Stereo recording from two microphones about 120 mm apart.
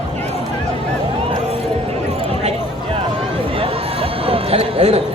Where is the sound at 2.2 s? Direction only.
55° right (ahead or behind).